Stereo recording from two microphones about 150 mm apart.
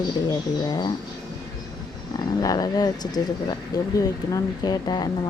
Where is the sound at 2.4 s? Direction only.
25° left (ahead or behind).